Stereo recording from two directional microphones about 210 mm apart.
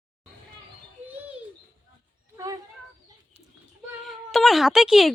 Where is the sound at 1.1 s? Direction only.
5° right (ahead or behind).